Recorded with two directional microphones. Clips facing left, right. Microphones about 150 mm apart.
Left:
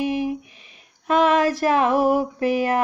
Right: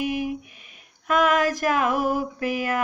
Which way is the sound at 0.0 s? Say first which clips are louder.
Left 3 dB; 30° left (ahead or behind).